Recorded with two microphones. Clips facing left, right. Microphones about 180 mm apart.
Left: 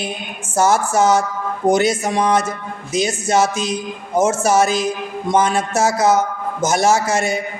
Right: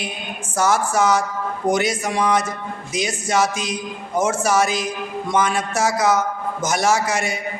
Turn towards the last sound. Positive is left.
turn(degrees=25)  # may be behind; listen again after turning